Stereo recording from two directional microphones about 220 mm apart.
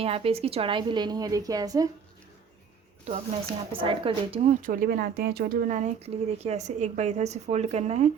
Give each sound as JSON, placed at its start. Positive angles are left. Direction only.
{"t": 0.0, "sound": "a woman's voice", "side_deg": -25}
{"t": 3.0, "sound": "a woman's voice", "side_deg": -30}
{"t": 4.6, "sound": "speech", "side_deg": -40}